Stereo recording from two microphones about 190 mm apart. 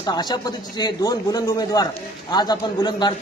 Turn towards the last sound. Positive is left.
turn(degrees=20)  # may be behind; listen again after turning